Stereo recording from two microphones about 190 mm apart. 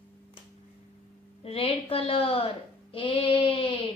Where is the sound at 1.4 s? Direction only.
30° left (ahead or behind).